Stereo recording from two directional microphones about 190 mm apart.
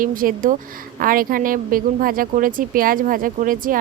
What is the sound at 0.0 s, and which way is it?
A woman's voice, 45° right (ahead or behind).